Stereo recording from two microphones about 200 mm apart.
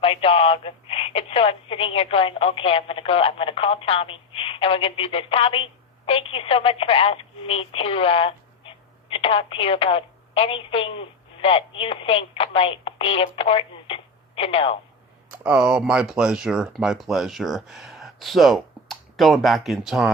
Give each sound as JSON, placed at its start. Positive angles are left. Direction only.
{"t": 0.0, "sound": "speech", "side_deg": 30}
{"t": 15.4, "sound": "speech", "side_deg": -5}